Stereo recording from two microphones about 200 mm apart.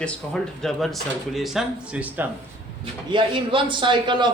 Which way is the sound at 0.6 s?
Centre (ahead or behind).